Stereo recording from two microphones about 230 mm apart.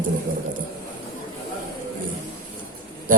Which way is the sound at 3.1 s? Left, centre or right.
Right.